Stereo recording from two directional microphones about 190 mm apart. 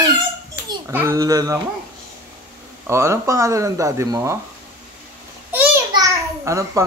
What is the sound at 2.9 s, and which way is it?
A child's voice, 15° right (ahead or behind).